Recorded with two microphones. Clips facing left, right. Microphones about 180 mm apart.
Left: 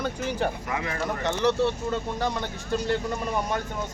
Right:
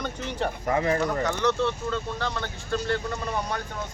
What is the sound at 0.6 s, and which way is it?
Speech, 35° right (ahead or behind).